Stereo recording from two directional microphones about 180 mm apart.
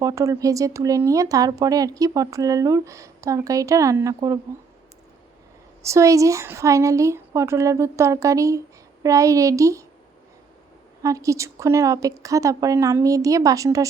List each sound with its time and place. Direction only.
0.0 s speech: 15° right (ahead or behind)
5.8 s a woman's voice: 15° right (ahead or behind)
11.0 s a woman's voice: 20° right (ahead or behind)